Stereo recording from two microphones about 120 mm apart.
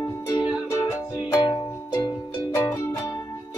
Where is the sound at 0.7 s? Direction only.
25° left (ahead or behind).